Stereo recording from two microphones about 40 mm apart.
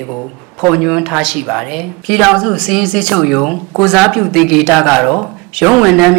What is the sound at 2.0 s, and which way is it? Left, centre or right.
Speech, centre.